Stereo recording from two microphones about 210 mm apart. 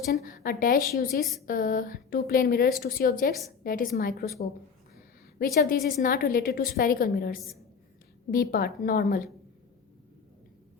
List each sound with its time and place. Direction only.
0.1 s a woman's voice: 45° left (ahead or behind)
5.5 s a woman's voice: 40° left (ahead or behind)